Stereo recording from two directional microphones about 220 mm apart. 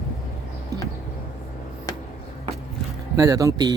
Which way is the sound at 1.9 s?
15° left (ahead or behind).